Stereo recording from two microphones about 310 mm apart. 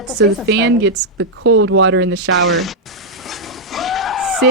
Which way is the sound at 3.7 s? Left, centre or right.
Centre.